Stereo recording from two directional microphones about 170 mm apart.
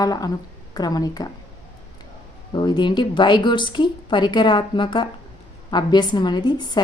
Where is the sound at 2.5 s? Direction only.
25° left (ahead or behind).